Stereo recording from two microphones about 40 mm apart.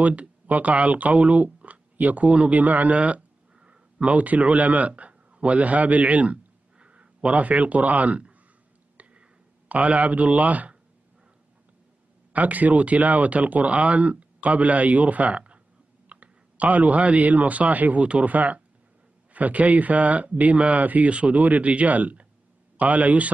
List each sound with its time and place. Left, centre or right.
0.0 s speech: right
9.7 s speech: right
12.3 s speech: right